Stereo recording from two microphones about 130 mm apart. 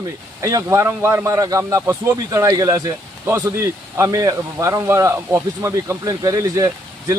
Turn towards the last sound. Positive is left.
turn(degrees=-30)  # may be behind; listen again after turning